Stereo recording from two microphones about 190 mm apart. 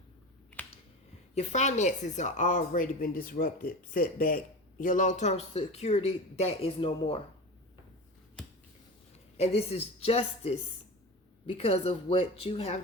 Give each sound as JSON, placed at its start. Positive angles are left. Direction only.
{"t": 1.4, "sound": "speech", "side_deg": 40}
{"t": 9.4, "sound": "speech", "side_deg": 30}